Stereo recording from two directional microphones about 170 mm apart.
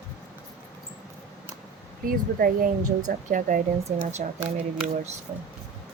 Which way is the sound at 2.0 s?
55° right (ahead or behind).